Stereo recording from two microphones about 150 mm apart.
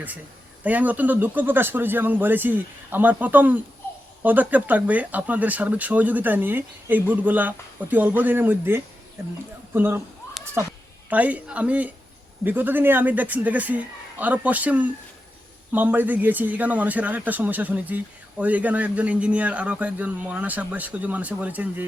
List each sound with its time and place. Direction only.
0.6 s speech: 10° right (ahead or behind)